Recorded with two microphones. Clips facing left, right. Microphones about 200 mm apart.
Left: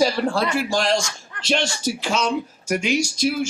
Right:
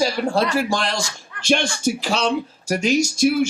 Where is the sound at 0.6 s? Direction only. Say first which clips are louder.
Left 1 dB; 55° right (ahead or behind).